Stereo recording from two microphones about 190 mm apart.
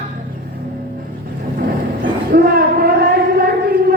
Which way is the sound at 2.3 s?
55° right (ahead or behind).